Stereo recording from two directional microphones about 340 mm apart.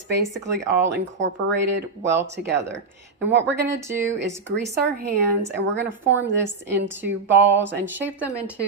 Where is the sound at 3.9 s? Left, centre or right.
Right.